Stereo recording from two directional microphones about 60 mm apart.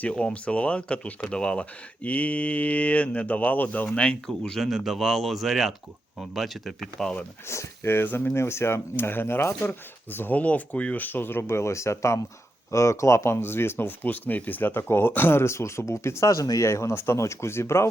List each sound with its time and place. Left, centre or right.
0.0 s speech: centre
3.8 s speech: centre
4.6 s speech: centre
7.4 s speech: left
10.4 s speech: left
16.3 s speech: left
16.6 s speech: left